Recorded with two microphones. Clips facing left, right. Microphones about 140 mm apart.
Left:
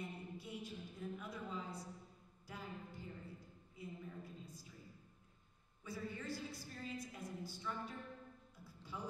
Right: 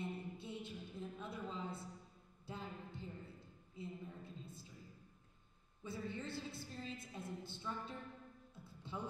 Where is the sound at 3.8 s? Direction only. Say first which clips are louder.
Right 3 dB; 25° right (ahead or behind).